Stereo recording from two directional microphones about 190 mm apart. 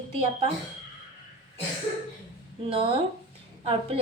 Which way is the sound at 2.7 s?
30° right (ahead or behind).